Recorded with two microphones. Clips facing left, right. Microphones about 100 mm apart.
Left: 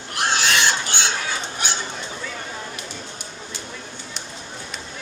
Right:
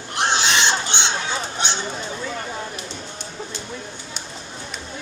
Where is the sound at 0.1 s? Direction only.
20° right (ahead or behind).